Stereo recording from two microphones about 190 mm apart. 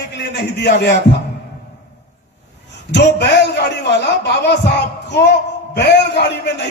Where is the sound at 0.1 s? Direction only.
65° left (ahead or behind).